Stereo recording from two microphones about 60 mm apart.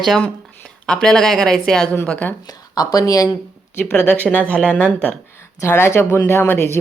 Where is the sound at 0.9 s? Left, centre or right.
Centre.